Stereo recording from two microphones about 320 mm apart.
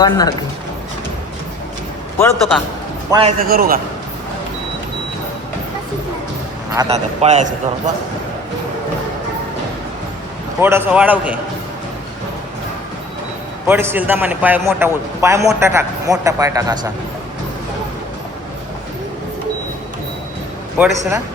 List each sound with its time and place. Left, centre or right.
0.0 s speech: centre
2.5 s a man's voice: centre
3.1 s a man's voice: centre
6.7 s a man's voice: centre
10.6 s a man's voice: centre
13.7 s a man's voice: centre
20.8 s a man's voice: centre